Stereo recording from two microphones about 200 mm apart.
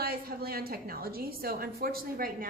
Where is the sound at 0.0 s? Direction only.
50° right (ahead or behind).